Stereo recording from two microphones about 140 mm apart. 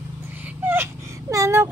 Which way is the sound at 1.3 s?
25° right (ahead or behind).